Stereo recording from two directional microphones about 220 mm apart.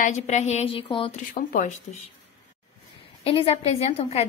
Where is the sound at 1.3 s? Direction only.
40° left (ahead or behind).